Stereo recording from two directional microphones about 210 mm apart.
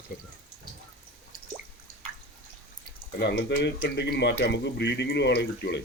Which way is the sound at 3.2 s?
55° left (ahead or behind).